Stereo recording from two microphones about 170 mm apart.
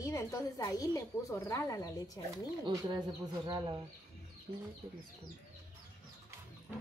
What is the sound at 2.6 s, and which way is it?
Speech, 25° right (ahead or behind).